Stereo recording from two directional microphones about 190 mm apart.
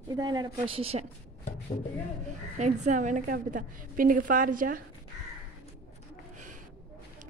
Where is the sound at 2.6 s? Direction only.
40° right (ahead or behind).